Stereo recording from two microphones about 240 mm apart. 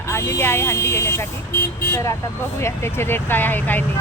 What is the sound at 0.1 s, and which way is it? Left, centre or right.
Speech, centre.